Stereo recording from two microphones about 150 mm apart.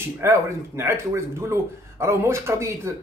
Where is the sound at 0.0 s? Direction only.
15° right (ahead or behind).